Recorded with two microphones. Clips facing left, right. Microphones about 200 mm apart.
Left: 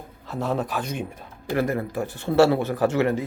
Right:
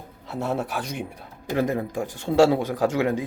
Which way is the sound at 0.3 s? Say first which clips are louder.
Left 1 dB; 10° right (ahead or behind).